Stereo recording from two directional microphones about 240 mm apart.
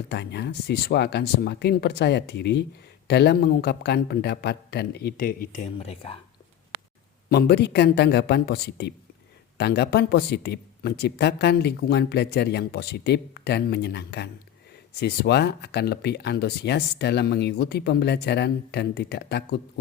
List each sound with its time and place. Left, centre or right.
0.1 s speech: left
7.3 s speech: left